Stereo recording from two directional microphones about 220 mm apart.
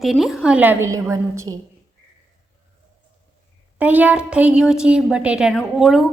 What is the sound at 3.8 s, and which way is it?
A woman's voice, 5° right (ahead or behind).